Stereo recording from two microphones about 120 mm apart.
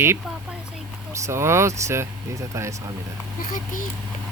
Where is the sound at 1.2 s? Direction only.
20° right (ahead or behind).